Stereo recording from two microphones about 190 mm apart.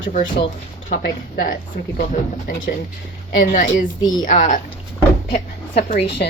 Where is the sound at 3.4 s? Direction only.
45° left (ahead or behind).